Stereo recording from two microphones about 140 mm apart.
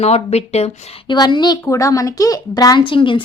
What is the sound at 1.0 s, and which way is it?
A woman's voice, 35° left (ahead or behind).